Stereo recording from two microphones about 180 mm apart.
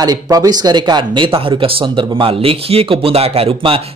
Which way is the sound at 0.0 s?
20° right (ahead or behind).